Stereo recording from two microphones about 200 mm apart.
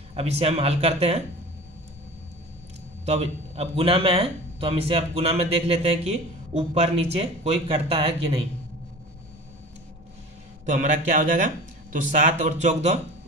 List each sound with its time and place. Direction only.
0.1 s speech: 30° right (ahead or behind)
3.1 s speech: 30° right (ahead or behind)
10.6 s speech: 35° right (ahead or behind)